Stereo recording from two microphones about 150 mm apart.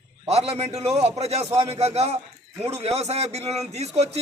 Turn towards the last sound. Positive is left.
turn(degrees=-45)  # may be behind; listen again after turning